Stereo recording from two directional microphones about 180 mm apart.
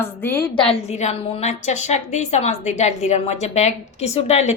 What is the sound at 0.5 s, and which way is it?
A woman's voice, 30° left (ahead or behind).